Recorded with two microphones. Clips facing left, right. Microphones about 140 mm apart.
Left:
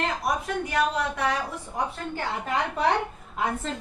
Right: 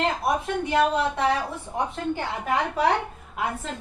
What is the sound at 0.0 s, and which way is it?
A woman's voice, 25° right (ahead or behind).